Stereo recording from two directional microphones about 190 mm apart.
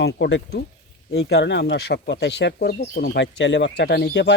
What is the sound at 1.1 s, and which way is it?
Speech, 80° left.